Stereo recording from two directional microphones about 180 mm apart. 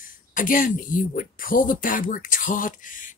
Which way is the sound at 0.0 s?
50° left (ahead or behind).